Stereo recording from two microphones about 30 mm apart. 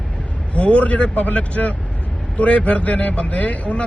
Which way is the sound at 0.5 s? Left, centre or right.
Left.